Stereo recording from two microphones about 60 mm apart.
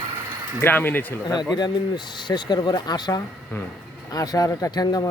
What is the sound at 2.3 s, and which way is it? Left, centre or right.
Speech, left.